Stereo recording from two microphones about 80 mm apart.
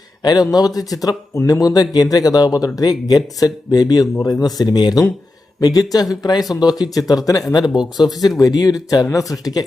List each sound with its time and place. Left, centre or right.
0.2 s speech: left
8.0 s speech: left
8.4 s speech: left